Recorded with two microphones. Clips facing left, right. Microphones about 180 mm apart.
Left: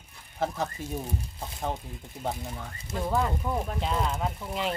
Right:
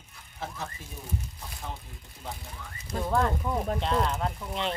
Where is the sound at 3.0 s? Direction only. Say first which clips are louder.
Right 1 dB; 5° left (ahead or behind).